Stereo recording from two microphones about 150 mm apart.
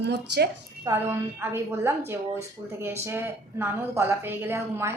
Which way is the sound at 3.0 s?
15° right (ahead or behind).